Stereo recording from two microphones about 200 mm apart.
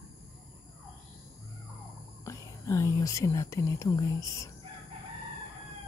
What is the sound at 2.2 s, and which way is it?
Speech, 15° left (ahead or behind).